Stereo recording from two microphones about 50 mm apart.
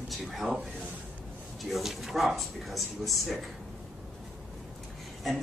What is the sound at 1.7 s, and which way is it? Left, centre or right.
Speech, centre.